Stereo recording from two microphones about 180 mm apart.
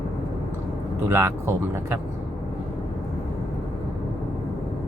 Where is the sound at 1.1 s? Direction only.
15° right (ahead or behind).